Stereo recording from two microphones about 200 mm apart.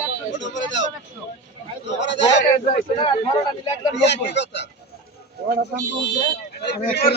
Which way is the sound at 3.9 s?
60° left (ahead or behind).